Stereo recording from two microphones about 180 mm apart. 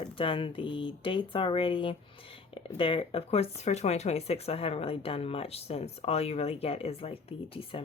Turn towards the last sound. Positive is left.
turn(degrees=30)  # may be behind; listen again after turning